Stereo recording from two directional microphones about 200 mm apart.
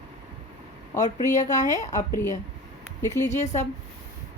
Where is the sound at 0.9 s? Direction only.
35° left (ahead or behind).